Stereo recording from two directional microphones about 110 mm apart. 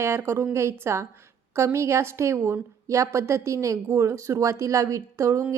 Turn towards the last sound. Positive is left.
turn(degrees=-30)  # may be behind; listen again after turning